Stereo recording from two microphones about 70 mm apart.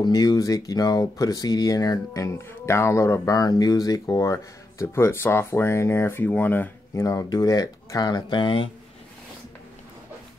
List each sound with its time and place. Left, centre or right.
0.0 s speech: left
2.4 s speech: left
3.3 s speech: left
4.2 s speech: left
7.0 s speech: left
7.2 s speech: left